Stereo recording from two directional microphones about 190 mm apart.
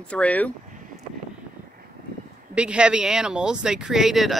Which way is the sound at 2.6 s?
5° right (ahead or behind).